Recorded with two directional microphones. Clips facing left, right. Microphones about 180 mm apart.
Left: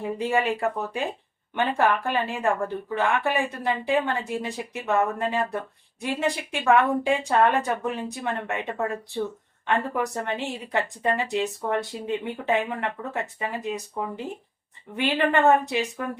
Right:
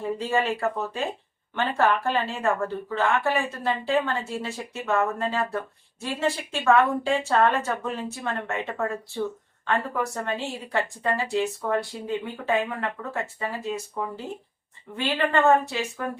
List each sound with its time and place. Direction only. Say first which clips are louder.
0.0 s a woman's voice: left 1 dB; 15° left (ahead or behind)
14.9 s a woman's voice: left 1 dB; 20° left (ahead or behind)